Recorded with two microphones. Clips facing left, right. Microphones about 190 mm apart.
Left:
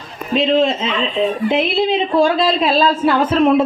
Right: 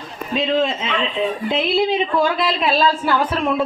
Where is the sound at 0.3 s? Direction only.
25° left (ahead or behind).